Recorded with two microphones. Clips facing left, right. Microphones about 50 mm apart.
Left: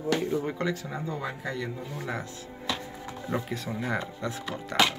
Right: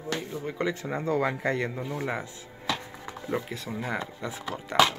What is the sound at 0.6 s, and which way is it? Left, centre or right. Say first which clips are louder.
Speech: right 5 dB; centre.